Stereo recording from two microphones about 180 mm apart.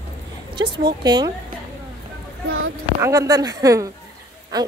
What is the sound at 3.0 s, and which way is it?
Speech, 20° right (ahead or behind).